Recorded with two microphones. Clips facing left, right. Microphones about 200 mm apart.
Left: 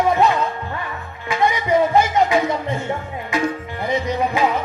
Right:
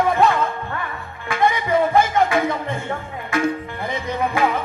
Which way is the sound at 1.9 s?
55° right (ahead or behind).